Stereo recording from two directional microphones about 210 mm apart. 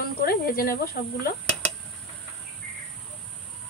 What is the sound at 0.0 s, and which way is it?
Snake, 45° left (ahead or behind).